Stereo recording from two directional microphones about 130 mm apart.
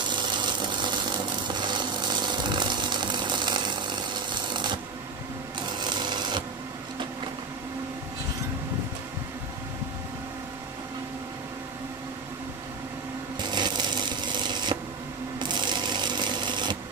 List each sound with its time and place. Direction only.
0.1 s a sound: 35° right (ahead or behind)
5.8 s cash register: 35° right (ahead or behind)
13.4 s rub: 35° right (ahead or behind)
15.3 s sewing machine: 35° right (ahead or behind)